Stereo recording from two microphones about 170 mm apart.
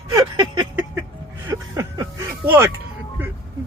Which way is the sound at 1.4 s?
15° right (ahead or behind).